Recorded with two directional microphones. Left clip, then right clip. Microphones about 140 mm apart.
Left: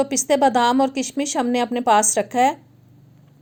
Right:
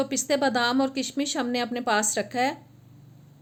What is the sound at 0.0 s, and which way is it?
A woman's voice, 45° left (ahead or behind).